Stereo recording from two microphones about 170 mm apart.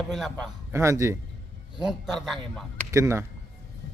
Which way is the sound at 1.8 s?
5° right (ahead or behind).